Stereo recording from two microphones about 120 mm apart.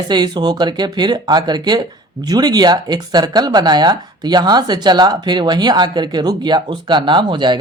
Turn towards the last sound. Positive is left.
turn(degrees=-40)  # may be behind; listen again after turning